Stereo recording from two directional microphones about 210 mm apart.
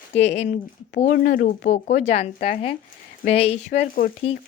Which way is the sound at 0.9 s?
40° left (ahead or behind).